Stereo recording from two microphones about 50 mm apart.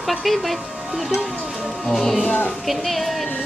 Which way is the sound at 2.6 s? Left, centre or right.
Centre.